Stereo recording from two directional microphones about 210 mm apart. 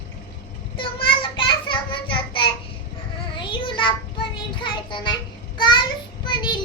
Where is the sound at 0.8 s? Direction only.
25° left (ahead or behind).